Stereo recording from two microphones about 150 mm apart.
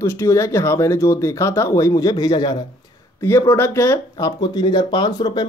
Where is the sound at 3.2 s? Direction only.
20° left (ahead or behind).